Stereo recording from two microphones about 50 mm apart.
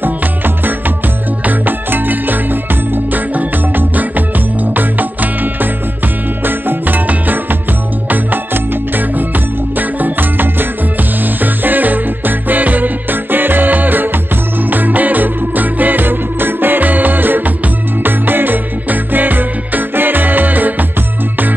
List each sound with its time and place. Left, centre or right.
1.4 s music: right
9.8 s music: right